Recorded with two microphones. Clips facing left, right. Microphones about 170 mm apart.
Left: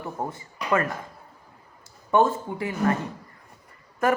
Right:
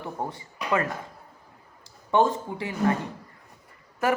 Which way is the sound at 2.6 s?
25° right (ahead or behind).